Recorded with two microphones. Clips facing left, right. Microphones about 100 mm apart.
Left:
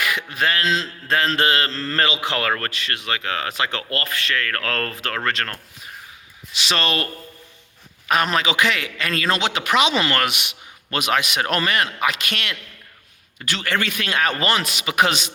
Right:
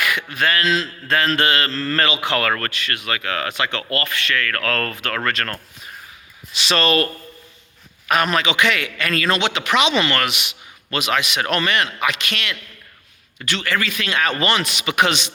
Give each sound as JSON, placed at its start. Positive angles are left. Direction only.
{"t": 0.0, "sound": "mantra", "side_deg": 30}
{"t": 5.1, "sound": "mantra", "side_deg": 20}
{"t": 5.5, "sound": "a sound", "side_deg": 10}
{"t": 6.6, "sound": "speech", "side_deg": 15}
{"t": 8.0, "sound": "mantra", "side_deg": 25}
{"t": 9.5, "sound": "a man's voice", "side_deg": 40}
{"t": 11.3, "sound": "speech", "side_deg": 35}
{"t": 13.4, "sound": "mantra", "side_deg": 30}
{"t": 13.8, "sound": "a man's voice", "side_deg": 50}